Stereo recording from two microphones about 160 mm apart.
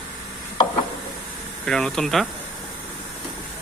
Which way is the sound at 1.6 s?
5° left (ahead or behind).